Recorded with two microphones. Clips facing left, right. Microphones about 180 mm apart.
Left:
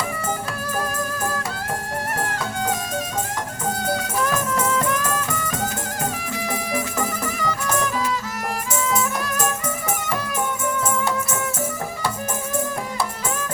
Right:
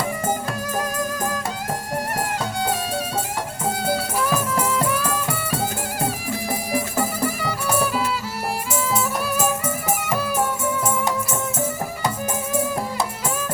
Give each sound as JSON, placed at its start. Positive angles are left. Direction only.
{"t": 2.2, "sound": "music", "side_deg": -10}
{"t": 3.8, "sound": "music", "side_deg": -5}
{"t": 6.7, "sound": "music", "side_deg": -30}
{"t": 7.4, "sound": "music", "side_deg": -10}
{"t": 9.2, "sound": "music", "side_deg": -5}